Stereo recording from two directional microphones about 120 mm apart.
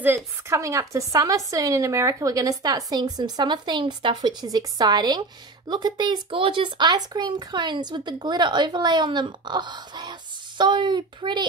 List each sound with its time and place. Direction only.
0.0 s speech: 20° right (ahead or behind); by 11.4 s 40° right (ahead or behind)